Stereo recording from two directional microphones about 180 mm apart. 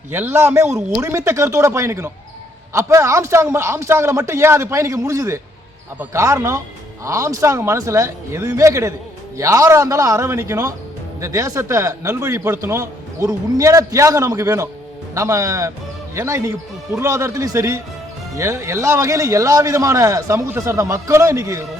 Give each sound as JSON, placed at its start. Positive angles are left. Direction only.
{"t": 0.1, "sound": "a man's voice", "side_deg": -10}